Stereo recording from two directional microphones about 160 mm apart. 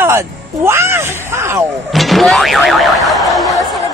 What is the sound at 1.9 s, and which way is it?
Speech, centre (ahead or behind).